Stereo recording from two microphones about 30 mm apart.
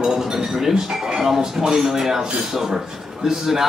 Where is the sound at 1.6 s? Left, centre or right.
Centre.